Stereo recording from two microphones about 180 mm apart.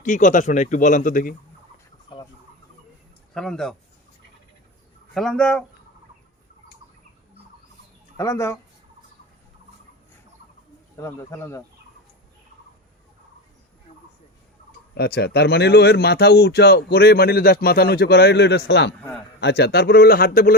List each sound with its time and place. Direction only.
0.0 s speech: 45° left (ahead or behind)
3.3 s speech: 5° left (ahead or behind)
5.1 s speech: centre (ahead or behind)
8.1 s speech: 15° left (ahead or behind)
11.0 s speech: 15° left (ahead or behind)
14.9 s speech: 60° left (ahead or behind)